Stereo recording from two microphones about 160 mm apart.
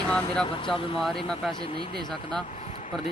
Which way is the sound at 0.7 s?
35° left (ahead or behind).